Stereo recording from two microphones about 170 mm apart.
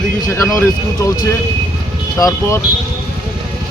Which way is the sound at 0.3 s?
15° left (ahead or behind).